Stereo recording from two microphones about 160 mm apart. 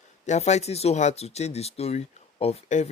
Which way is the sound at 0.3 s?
45° left (ahead or behind).